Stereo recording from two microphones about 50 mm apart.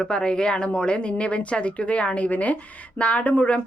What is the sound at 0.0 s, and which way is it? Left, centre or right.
Speech, centre.